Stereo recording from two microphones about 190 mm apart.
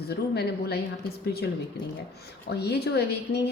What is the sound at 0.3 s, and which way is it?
A woman's voice, 60° left (ahead or behind).